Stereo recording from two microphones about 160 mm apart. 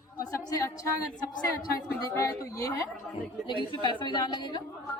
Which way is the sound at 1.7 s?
20° left (ahead or behind).